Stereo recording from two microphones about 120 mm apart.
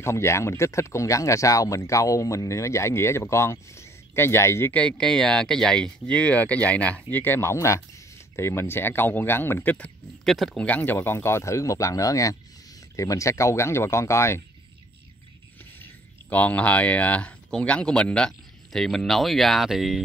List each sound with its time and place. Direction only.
0.0 s speech: 20° left (ahead or behind)
4.7 s speech: 10° left (ahead or behind)
10.2 s speech: centre (ahead or behind); by 14.4 s 25° left (ahead or behind)
15.8 s speech: 15° left (ahead or behind)